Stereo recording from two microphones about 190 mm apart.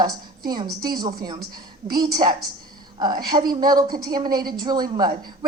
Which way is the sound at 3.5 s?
20° right (ahead or behind).